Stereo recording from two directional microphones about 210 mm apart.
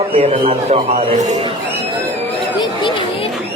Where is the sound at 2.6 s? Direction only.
25° left (ahead or behind).